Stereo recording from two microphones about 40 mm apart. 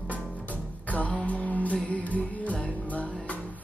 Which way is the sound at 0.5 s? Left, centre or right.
Left.